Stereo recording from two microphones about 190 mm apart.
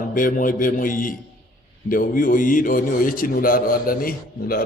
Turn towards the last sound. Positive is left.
turn(degrees=50)  # may be behind; listen again after turning